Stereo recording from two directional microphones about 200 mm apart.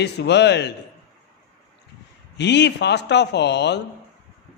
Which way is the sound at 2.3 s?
60° left (ahead or behind).